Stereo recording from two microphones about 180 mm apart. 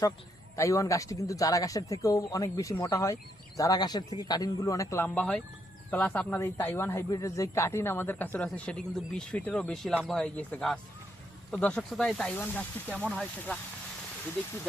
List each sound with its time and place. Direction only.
0.5 s speech: 15° left (ahead or behind); by 13.6 s centre (ahead or behind)